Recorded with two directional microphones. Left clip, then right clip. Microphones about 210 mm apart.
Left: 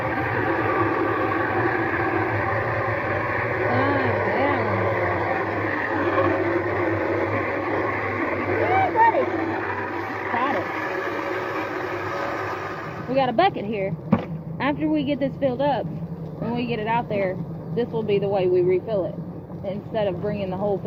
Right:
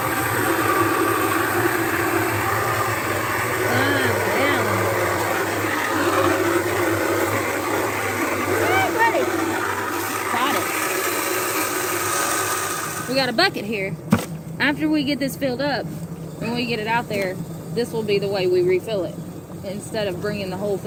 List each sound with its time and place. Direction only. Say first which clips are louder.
0.0 s vehicle: right 2 dB; 25° right (ahead or behind)
13.1 s speech: even; 55° right (ahead or behind)
20.0 s speech: even; 55° right (ahead or behind)